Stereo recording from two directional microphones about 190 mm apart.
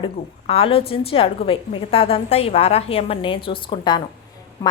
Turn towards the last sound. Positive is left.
turn(degrees=20)  # may be behind; listen again after turning